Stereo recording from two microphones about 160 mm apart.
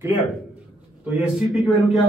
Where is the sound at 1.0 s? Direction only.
5° right (ahead or behind).